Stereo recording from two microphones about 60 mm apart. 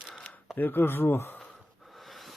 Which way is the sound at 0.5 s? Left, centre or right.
Left.